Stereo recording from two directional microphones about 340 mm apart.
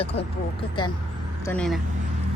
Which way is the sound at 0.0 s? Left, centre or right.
Centre.